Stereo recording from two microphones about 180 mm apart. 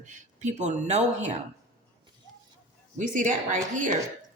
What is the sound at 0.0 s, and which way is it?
Speech, 40° right (ahead or behind).